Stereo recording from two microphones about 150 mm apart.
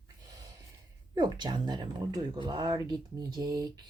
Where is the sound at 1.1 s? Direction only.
30° right (ahead or behind).